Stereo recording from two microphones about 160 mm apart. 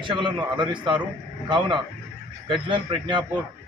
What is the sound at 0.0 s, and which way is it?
Speech, 30° right (ahead or behind).